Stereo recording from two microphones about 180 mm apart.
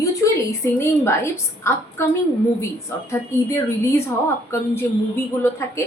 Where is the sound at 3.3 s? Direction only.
15° left (ahead or behind).